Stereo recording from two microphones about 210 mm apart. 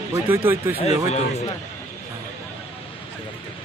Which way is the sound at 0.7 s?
30° left (ahead or behind).